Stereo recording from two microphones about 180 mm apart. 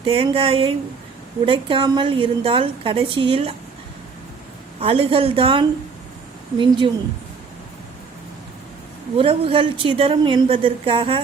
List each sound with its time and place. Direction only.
0.0 s a woman's voice: 30° right (ahead or behind)
4.8 s a woman's voice: 30° right (ahead or behind)
9.1 s a woman's voice: 30° right (ahead or behind)